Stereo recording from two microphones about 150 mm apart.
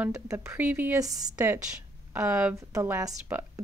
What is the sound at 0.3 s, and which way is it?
Speech, 15° right (ahead or behind).